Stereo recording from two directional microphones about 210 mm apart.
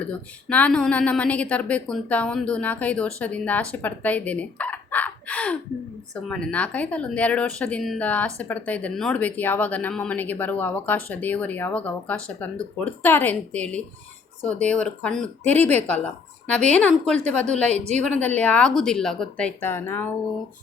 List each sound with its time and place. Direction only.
0.0 s speech: 5° left (ahead or behind)
17.7 s a woman's voice: 30° right (ahead or behind)
17.9 s speech: 5° left (ahead or behind)